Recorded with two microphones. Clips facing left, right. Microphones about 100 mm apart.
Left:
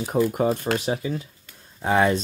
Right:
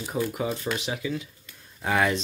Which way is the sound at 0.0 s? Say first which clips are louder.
Left 7 dB; 45° left (ahead or behind).